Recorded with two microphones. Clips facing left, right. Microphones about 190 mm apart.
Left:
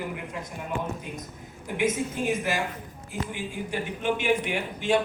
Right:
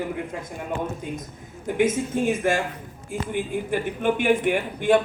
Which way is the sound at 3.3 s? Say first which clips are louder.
Right 9 dB; 55° right (ahead or behind).